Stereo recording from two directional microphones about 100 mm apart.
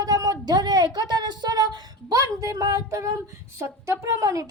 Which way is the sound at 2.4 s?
35° right (ahead or behind).